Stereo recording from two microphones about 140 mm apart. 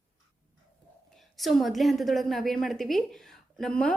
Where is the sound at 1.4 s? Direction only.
Centre (ahead or behind).